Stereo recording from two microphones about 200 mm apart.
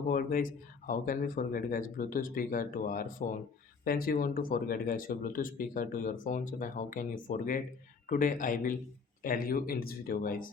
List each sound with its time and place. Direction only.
0.1 s speech: 45° left (ahead or behind)